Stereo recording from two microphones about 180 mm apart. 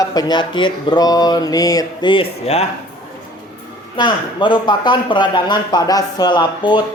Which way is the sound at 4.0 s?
25° left (ahead or behind).